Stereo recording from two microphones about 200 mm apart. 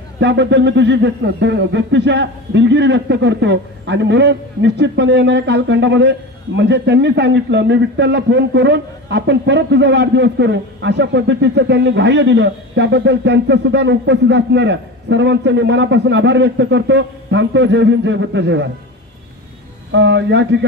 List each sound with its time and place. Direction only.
0.2 s speech: 60° right (ahead or behind)
19.9 s speech: 65° right (ahead or behind)